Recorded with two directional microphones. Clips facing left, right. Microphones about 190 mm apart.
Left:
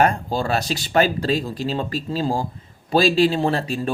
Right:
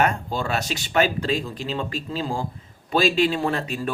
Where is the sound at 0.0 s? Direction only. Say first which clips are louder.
Left 3 dB; 35° left (ahead or behind).